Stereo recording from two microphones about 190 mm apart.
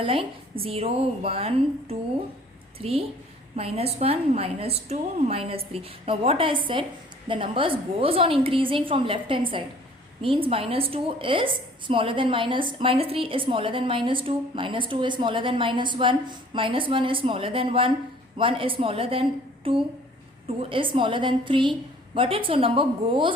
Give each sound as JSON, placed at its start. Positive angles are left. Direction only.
{"t": 0.0, "sound": "a woman's voice", "side_deg": -30}